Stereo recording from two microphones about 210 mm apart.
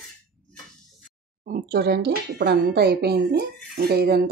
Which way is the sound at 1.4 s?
45° right (ahead or behind).